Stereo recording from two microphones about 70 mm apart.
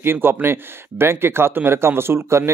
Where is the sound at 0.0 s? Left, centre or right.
Right.